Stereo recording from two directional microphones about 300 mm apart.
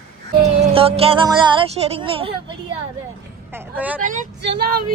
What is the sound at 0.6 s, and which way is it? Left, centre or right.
Speech, centre.